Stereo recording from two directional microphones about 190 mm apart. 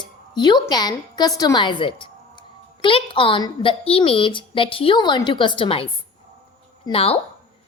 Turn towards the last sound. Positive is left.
turn(degrees=30)  # may be behind; listen again after turning